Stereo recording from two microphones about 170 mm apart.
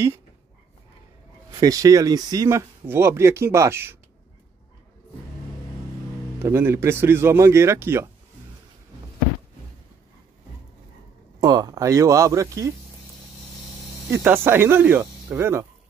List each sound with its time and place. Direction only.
1.6 s speech: 20° right (ahead or behind)
6.4 s speech: 15° right (ahead or behind)
11.4 s speech: 20° right (ahead or behind)
14.1 s speech: 15° right (ahead or behind)